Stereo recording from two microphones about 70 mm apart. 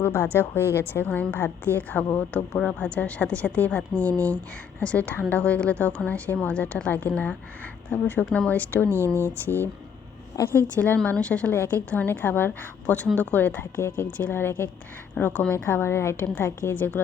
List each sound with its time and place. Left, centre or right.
0.0 s a woman's voice: left
1.0 s a woman's voice: left
10.3 s a woman's voice: left
10.8 s a woman's voice: centre
11.5 s a woman's voice: left
15.2 s a woman's voice: centre
15.5 s a woman's voice: left
16.7 s a woman's voice: left